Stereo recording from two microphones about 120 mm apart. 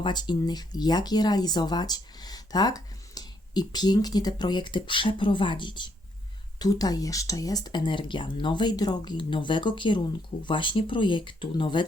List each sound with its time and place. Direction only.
0.0 s speech: 40° left (ahead or behind)